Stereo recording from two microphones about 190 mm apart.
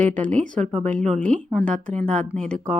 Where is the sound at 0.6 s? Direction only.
40° right (ahead or behind).